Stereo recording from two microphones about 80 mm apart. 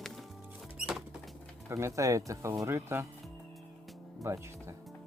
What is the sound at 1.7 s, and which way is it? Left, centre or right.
Speech, right.